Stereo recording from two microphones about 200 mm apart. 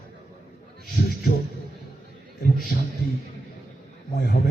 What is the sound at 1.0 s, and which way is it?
Speech, 50° left (ahead or behind).